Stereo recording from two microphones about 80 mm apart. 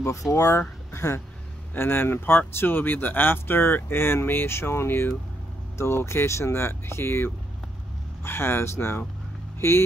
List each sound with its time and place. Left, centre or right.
0.0 s speech: left